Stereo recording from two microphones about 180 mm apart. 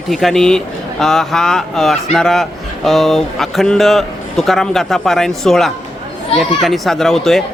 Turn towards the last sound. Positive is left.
turn(degrees=0)  # may be behind; listen again after turning